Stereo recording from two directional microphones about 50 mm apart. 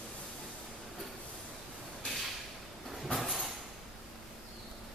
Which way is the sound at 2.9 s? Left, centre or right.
Centre.